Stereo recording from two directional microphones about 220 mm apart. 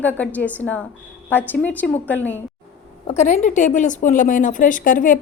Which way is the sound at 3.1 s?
30° left (ahead or behind).